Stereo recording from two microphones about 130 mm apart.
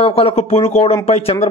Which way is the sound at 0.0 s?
50° left (ahead or behind).